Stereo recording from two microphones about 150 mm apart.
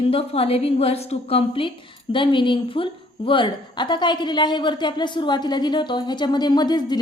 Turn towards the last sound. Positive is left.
turn(degrees=30)  # may be behind; listen again after turning